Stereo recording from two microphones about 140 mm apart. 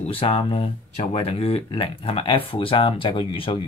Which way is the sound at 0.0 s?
40° left (ahead or behind).